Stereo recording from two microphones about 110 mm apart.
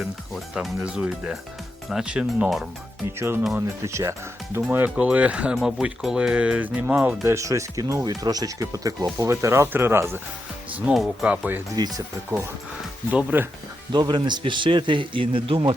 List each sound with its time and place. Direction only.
0.0 s speech: 5° right (ahead or behind)
3.8 s speech: 25° right (ahead or behind); by 7.3 s 5° right (ahead or behind)
7.3 s speech: 25° right (ahead or behind)
10.9 s speech: 5° right (ahead or behind)
11.8 s speech: 30° right (ahead or behind)
13.1 s speech: 15° right (ahead or behind)
13.9 s a man's voice: 40° right (ahead or behind)